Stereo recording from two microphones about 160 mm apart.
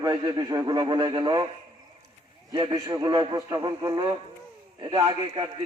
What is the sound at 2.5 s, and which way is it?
A man's voice, 25° right (ahead or behind).